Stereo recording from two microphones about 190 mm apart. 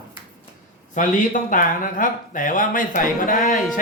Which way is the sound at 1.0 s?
40° left (ahead or behind).